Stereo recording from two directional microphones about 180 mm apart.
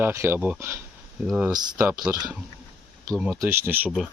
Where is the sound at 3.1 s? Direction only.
5° right (ahead or behind).